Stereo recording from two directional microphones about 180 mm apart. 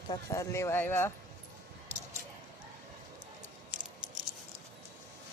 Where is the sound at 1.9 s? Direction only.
40° right (ahead or behind).